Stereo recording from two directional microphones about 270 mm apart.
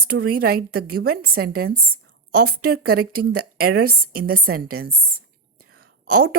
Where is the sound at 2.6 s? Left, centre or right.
Right.